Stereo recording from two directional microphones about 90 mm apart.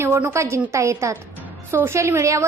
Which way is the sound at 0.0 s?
30° right (ahead or behind).